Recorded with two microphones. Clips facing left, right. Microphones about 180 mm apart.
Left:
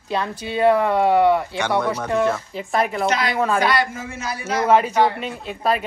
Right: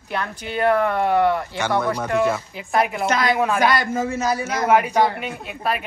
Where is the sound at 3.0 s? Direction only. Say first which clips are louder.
Right 1 dB; 50° right (ahead or behind).